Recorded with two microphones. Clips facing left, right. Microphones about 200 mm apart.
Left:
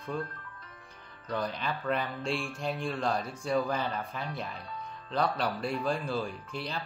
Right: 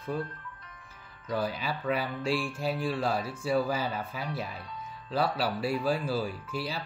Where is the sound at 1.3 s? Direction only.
5° right (ahead or behind).